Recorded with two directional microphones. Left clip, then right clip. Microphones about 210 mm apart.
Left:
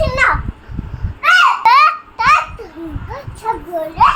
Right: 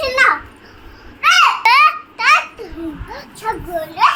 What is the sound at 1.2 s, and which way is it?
Babbling, 15° left (ahead or behind).